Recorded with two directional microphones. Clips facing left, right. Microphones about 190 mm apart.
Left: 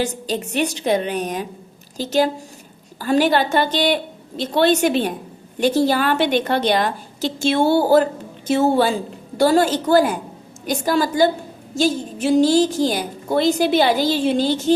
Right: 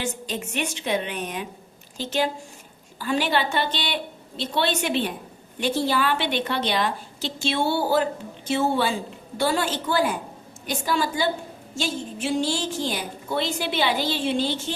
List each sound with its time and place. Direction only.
0.0 s a woman's voice: 35° left (ahead or behind)